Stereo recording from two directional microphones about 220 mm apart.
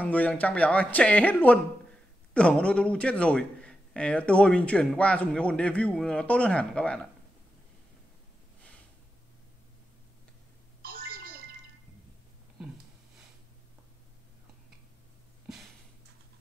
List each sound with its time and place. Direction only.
0.0 s a man's voice: 5° left (ahead or behind)
10.8 s telephone: 40° right (ahead or behind)